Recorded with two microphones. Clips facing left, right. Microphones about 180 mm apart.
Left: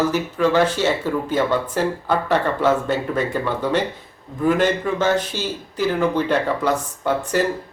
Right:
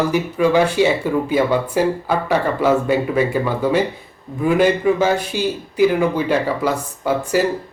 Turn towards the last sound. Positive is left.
turn(degrees=-10)  # may be behind; listen again after turning